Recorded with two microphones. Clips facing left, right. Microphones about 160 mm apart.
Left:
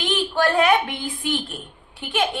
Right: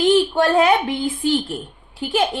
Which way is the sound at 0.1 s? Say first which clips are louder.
Right 2 dB; 30° right (ahead or behind).